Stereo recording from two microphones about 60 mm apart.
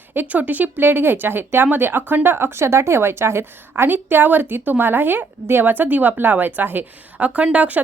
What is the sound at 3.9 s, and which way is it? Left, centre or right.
Speech, right.